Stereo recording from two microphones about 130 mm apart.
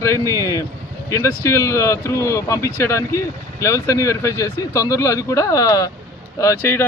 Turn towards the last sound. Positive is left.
turn(degrees=20)  # may be behind; listen again after turning